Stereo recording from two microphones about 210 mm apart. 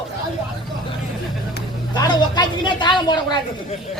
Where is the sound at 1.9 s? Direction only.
20° left (ahead or behind).